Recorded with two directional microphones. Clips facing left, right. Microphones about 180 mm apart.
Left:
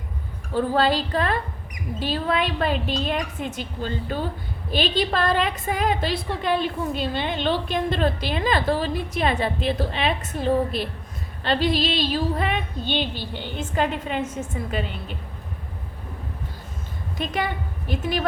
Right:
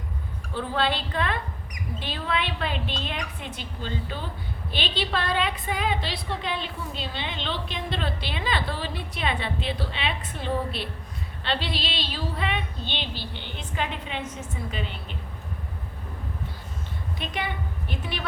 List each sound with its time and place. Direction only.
0.5 s a woman's voice: 40° left (ahead or behind)
17.2 s a woman's voice: 45° left (ahead or behind)